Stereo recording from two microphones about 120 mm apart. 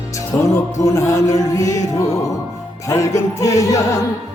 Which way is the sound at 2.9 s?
25° left (ahead or behind).